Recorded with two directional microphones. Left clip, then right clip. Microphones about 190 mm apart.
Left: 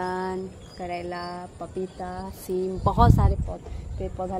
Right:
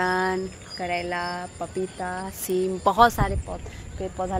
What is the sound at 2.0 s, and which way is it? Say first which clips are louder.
Speech: right 4 dB; 10° right (ahead or behind).